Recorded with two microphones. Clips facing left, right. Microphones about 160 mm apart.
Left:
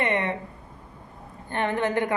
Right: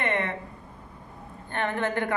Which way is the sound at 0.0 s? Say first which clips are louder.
Left 3 dB; 15° left (ahead or behind).